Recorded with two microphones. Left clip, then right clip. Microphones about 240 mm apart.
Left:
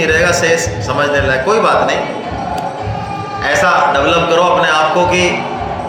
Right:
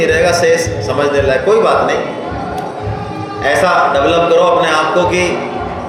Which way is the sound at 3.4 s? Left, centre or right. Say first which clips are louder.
Even; left.